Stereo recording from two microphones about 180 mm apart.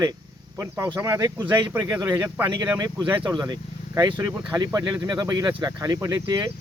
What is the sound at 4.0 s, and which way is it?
Speech, 20° right (ahead or behind).